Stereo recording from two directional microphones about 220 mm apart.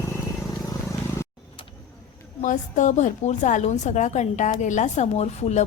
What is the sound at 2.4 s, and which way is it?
A woman's voice, 35° left (ahead or behind).